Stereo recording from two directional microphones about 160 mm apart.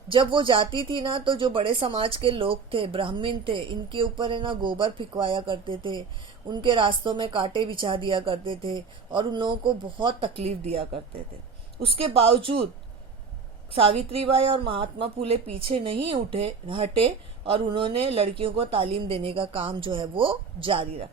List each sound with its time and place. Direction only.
0.1 s speech: 30° right (ahead or behind)
13.7 s speech: 35° right (ahead or behind)